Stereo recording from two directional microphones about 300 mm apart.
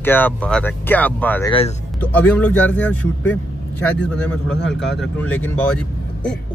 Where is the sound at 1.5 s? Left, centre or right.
Centre.